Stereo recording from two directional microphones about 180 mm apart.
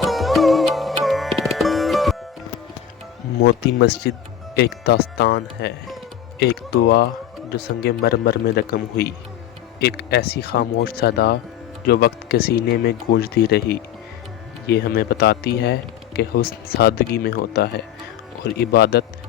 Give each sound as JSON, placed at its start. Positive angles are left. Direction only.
{"t": 0.0, "sound": "music", "side_deg": 0}
{"t": 3.4, "sound": "a man's voice", "side_deg": 65}